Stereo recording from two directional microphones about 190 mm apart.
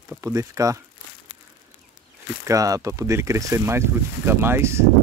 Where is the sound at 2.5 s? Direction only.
15° right (ahead or behind).